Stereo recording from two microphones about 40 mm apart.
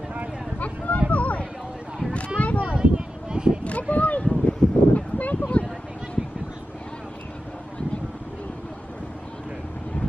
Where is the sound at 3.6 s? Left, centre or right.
Left.